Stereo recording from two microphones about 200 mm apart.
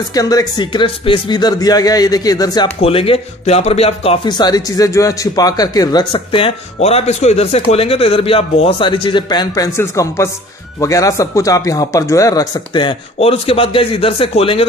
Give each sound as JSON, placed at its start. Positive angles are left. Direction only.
{"t": 0.1, "sound": "speech", "side_deg": 20}